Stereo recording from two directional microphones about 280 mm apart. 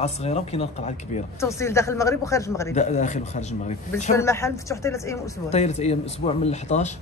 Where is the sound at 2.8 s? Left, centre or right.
Left.